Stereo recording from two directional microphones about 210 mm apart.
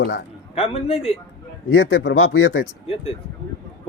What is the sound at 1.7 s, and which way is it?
Speech, 70° left (ahead or behind).